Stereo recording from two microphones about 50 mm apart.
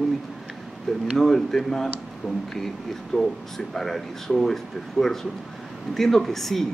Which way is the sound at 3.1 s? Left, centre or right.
Centre.